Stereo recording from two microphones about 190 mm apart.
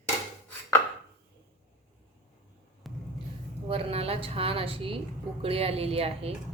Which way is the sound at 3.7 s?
30° right (ahead or behind).